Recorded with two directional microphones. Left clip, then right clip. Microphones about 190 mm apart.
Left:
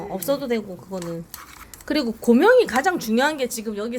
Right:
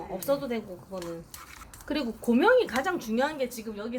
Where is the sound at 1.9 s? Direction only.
35° left (ahead or behind); by 3.8 s 55° left (ahead or behind).